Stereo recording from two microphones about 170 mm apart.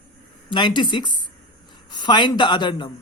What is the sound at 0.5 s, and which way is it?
Speech, 25° left (ahead or behind).